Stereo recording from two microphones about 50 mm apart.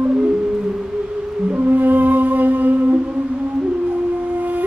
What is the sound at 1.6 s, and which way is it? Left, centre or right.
Music, right.